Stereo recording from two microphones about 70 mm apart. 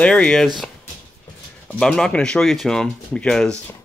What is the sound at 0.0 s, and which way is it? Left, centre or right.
Speech, centre.